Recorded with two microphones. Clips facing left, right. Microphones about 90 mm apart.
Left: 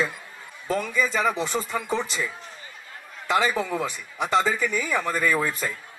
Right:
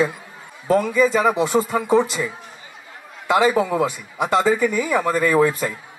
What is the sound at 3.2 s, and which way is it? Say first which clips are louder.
Speech: right 6 dB; 15° right (ahead or behind).